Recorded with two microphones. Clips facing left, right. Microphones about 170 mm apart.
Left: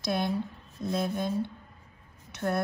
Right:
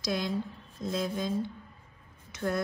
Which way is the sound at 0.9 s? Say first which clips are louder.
Left 2 dB; 55° left (ahead or behind).